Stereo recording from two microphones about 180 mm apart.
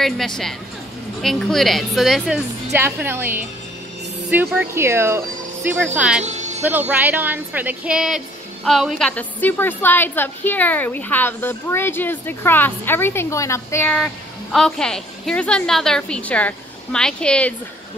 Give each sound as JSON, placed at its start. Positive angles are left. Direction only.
{"t": 0.0, "sound": "a woman's voice", "side_deg": 0}
{"t": 2.7, "sound": "a woman's voice", "side_deg": -10}
{"t": 6.2, "sound": "music", "side_deg": -40}
{"t": 6.6, "sound": "a woman's voice", "side_deg": -10}
{"t": 13.9, "sound": "a woman's voice", "side_deg": 5}